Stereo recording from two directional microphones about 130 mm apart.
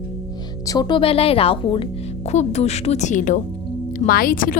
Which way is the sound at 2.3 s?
55° left (ahead or behind).